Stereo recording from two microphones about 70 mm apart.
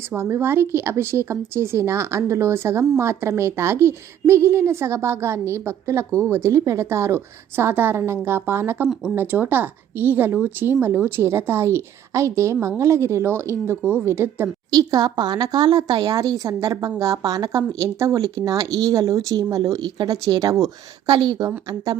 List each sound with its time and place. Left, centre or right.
0.2 s a woman's voice: right
14.7 s speech: right
21.1 s speech: right